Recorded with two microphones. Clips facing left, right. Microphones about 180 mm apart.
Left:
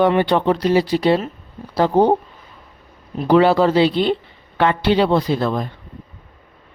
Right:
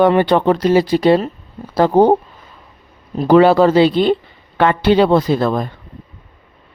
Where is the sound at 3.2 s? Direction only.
45° right (ahead or behind).